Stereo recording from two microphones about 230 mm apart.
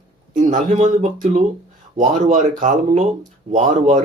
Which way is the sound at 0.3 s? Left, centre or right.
Right.